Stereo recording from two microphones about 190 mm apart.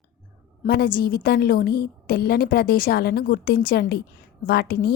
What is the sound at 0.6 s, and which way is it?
A woman's voice, 55° left (ahead or behind).